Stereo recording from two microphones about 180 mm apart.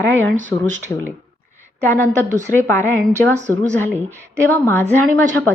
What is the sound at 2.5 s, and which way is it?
Speech, 15° left (ahead or behind).